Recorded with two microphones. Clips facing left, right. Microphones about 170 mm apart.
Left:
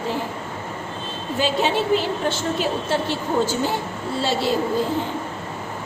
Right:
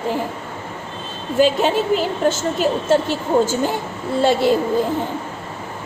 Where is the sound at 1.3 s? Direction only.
50° right (ahead or behind).